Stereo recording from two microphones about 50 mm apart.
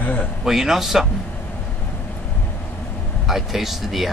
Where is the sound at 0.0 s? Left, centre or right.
Left.